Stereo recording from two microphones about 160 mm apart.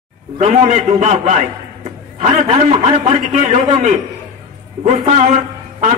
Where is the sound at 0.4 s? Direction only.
45° right (ahead or behind).